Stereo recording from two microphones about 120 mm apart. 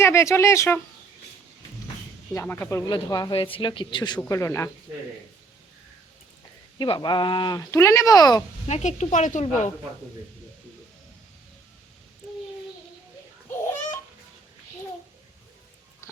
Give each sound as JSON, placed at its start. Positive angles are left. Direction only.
{"t": 0.0, "sound": "speech", "side_deg": 25}
{"t": 2.3, "sound": "speech", "side_deg": 20}
{"t": 2.9, "sound": "speech", "side_deg": 35}
{"t": 3.3, "sound": "speech", "side_deg": 50}
{"t": 4.3, "sound": "speech", "side_deg": 25}
{"t": 6.7, "sound": "speech", "side_deg": 40}
{"t": 8.6, "sound": "speech", "side_deg": 70}